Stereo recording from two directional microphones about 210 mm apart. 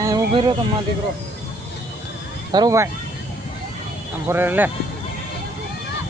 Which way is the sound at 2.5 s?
15° right (ahead or behind).